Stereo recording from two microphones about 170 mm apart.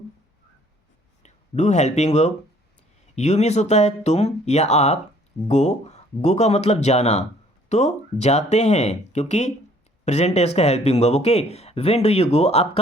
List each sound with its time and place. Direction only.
1.2 s speech: 45° left (ahead or behind)